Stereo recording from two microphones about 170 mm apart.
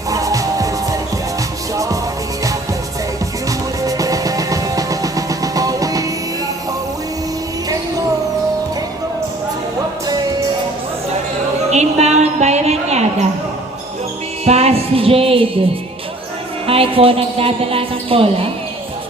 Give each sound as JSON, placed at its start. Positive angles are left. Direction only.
{"t": 0.1, "sound": "music", "side_deg": -20}
{"t": 3.8, "sound": "music", "side_deg": -20}
{"t": 11.7, "sound": "a sound", "side_deg": -40}
{"t": 14.4, "sound": "music", "side_deg": -40}
{"t": 16.6, "sound": "speech", "side_deg": -35}